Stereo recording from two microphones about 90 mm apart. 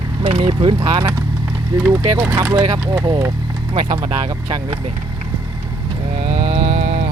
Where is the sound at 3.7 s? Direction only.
60° right (ahead or behind).